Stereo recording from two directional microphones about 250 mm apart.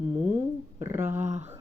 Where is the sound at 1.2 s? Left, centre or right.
Right.